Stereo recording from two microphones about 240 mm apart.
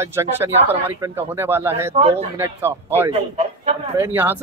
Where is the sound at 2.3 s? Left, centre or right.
Centre.